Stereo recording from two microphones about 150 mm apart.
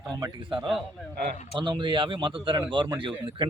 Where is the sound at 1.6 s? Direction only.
30° right (ahead or behind).